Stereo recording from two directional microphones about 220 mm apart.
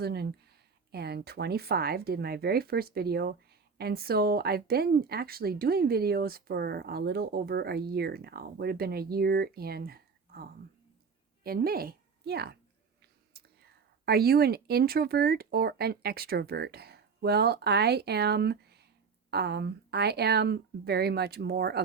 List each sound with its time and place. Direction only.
0.0 s a woman's voice: 45° right (ahead or behind)